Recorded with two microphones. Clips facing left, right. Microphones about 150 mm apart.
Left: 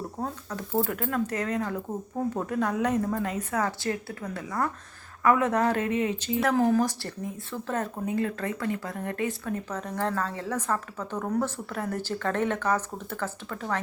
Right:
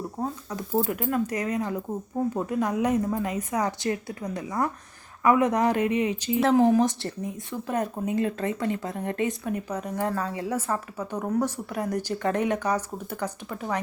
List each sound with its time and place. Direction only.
0.2 s speech: 10° right (ahead or behind)
6.4 s speech: 20° right (ahead or behind)